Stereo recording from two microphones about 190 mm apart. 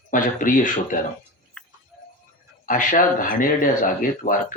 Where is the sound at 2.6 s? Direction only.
45° left (ahead or behind).